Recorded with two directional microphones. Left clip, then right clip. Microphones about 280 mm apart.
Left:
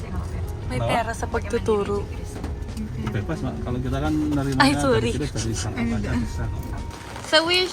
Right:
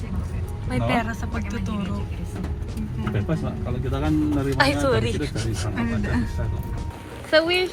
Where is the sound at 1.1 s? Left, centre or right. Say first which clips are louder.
Left 6 dB; left.